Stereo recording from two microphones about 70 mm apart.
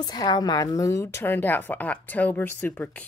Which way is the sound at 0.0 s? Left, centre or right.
Left.